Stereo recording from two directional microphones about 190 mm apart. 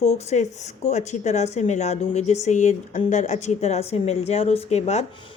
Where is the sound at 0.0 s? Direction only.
35° left (ahead or behind).